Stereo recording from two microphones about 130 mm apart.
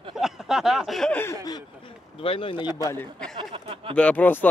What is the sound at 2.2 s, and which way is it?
Speech, 45° left (ahead or behind).